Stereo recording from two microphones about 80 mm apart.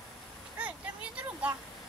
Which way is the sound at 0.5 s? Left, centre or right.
Centre.